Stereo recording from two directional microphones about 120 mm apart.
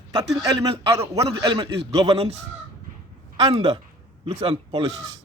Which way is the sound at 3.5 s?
55° right (ahead or behind).